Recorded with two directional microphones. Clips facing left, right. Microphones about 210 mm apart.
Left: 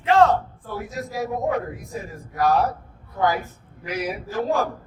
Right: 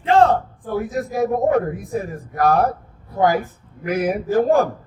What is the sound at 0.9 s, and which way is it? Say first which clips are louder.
Speech: right 6 dB; 55° right (ahead or behind).